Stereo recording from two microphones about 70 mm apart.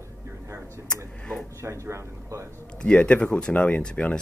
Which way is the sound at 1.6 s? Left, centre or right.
Right.